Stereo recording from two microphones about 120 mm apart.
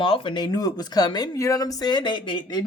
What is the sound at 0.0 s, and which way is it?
Speech, 45° left (ahead or behind).